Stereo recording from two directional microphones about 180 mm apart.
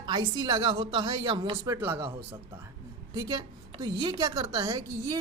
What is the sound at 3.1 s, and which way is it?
A woman's voice, 20° right (ahead or behind).